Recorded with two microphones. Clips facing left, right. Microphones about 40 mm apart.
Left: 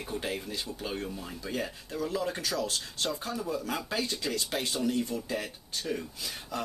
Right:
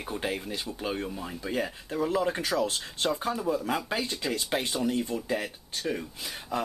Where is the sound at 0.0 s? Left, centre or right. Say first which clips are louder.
Right 2 dB; centre.